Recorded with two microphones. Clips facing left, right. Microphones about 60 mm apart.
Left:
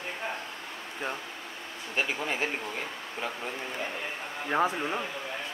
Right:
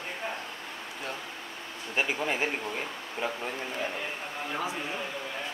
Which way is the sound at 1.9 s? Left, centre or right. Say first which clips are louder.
Right 1 dB; centre.